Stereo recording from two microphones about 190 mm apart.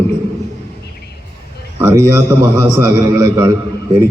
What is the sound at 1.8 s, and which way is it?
A man's voice, 15° right (ahead or behind).